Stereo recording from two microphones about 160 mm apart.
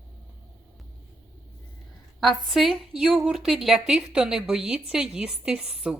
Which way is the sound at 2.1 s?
Centre (ahead or behind).